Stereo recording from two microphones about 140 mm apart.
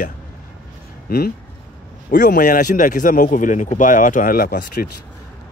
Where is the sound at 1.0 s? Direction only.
90° left.